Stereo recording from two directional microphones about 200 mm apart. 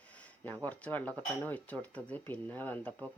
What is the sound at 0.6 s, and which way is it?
Speech, 5° left (ahead or behind).